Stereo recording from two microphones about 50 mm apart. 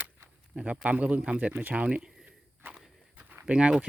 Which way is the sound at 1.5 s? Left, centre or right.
Right.